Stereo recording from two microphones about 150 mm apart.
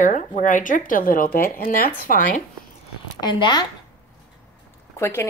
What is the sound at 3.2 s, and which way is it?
Speech, 30° left (ahead or behind).